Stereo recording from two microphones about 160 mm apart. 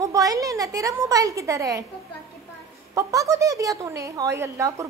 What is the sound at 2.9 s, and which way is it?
Speech, 20° right (ahead or behind).